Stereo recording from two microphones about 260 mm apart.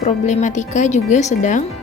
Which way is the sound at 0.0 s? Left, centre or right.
Left.